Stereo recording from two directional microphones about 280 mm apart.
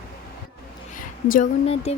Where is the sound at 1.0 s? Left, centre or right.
Left.